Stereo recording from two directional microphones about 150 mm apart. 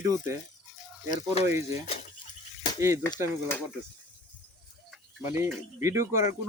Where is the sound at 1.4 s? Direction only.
20° right (ahead or behind).